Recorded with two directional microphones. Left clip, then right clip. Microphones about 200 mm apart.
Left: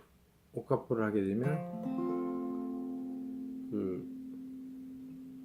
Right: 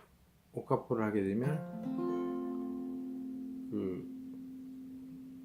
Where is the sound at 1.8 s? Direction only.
30° left (ahead or behind).